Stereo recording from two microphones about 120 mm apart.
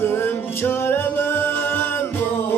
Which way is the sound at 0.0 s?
20° left (ahead or behind).